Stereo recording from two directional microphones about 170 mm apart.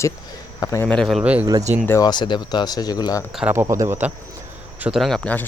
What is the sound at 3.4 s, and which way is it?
Speech, 15° right (ahead or behind).